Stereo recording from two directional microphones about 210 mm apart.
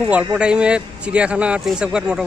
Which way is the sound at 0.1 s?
5° right (ahead or behind).